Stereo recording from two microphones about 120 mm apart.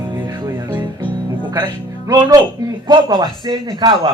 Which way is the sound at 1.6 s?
35° right (ahead or behind).